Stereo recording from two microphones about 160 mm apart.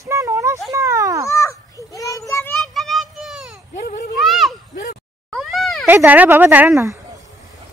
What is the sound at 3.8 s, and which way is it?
Speech, 55° left (ahead or behind).